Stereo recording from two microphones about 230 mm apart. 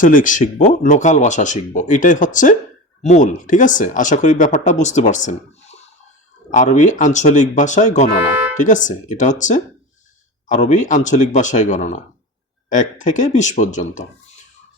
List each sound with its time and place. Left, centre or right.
0.0 s speech: left